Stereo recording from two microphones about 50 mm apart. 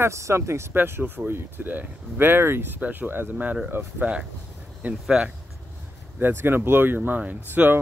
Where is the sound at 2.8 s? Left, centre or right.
Right.